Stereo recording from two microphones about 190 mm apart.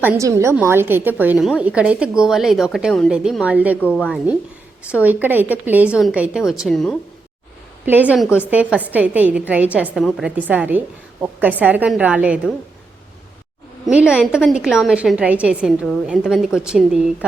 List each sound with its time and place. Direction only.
0.0 s a woman's voice: 15° right (ahead or behind)
3.9 s a woman's voice: 5° left (ahead or behind)
5.0 s a woman's voice: 10° right (ahead or behind)
13.8 s a woman's voice: 5° right (ahead or behind)